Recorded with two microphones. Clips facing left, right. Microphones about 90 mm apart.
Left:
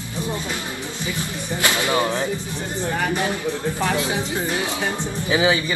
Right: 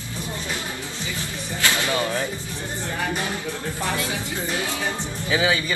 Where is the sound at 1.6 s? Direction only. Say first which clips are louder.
Left 3 dB; 20° left (ahead or behind).